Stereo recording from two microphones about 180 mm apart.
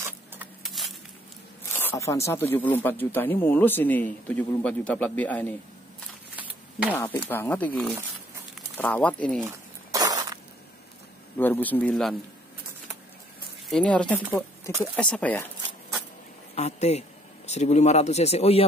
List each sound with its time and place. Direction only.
0.8 s a sound: centre (ahead or behind)
1.7 s speech: 10° left (ahead or behind)
6.9 s speech: 10° left (ahead or behind)
9.8 s a sound: 20° right (ahead or behind)
11.3 s speech: 10° left (ahead or behind)
13.7 s speech: 5° left (ahead or behind)
16.5 s a man's voice: 40° left (ahead or behind)